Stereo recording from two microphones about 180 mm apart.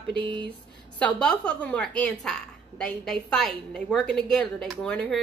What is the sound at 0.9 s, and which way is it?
A woman's voice, 5° left (ahead or behind).